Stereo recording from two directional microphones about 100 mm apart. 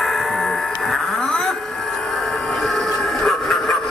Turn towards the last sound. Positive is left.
turn(degrees=5)  # may be behind; listen again after turning